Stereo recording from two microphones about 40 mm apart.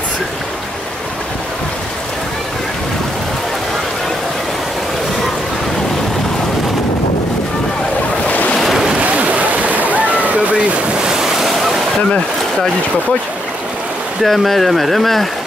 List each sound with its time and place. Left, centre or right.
8.5 s boat: centre
9.0 s splash: right
11.1 s waves: centre
14.2 s speech: centre